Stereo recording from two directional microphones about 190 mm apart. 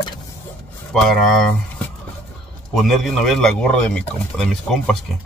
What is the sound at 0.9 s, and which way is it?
Speech, centre (ahead or behind).